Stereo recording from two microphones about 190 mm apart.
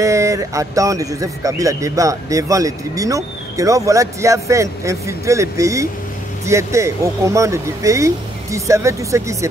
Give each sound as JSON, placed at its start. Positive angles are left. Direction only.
{"t": 0.0, "sound": "a man's voice", "side_deg": -15}